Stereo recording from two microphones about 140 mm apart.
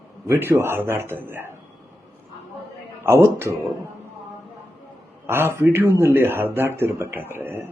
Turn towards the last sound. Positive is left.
turn(degrees=-15)  # may be behind; listen again after turning